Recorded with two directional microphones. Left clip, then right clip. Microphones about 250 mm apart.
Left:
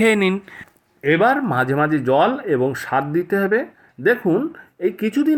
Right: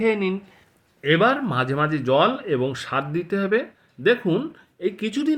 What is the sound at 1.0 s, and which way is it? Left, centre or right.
Speech, centre.